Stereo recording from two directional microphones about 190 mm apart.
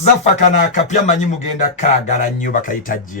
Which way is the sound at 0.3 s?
40° left (ahead or behind).